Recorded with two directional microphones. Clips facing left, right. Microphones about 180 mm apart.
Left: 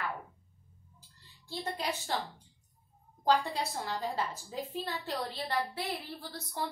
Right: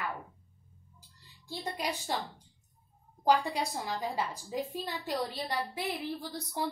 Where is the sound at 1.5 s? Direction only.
10° right (ahead or behind).